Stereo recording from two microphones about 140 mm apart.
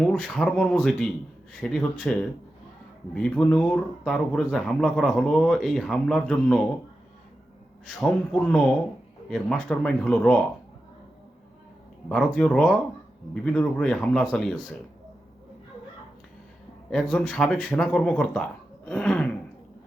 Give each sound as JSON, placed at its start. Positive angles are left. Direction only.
{"t": 0.0, "sound": "speech", "side_deg": 5}
{"t": 7.9, "sound": "speech", "side_deg": 5}
{"t": 12.0, "sound": "speech", "side_deg": 5}
{"t": 16.9, "sound": "speech", "side_deg": 5}